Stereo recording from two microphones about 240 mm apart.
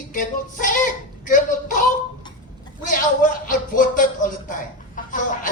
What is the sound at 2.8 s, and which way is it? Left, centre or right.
A man's voice, left.